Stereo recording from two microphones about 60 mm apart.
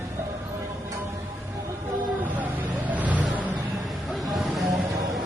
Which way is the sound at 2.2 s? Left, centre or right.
Right.